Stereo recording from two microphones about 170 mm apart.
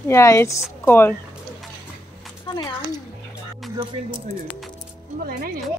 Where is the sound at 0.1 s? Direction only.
15° left (ahead or behind).